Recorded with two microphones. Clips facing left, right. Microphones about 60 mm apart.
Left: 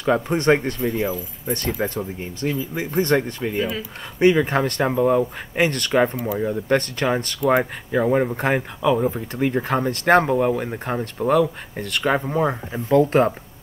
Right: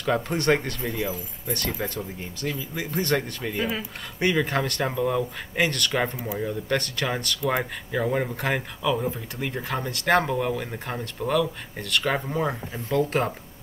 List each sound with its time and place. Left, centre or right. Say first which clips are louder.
0.0 s speech: left 5 dB; left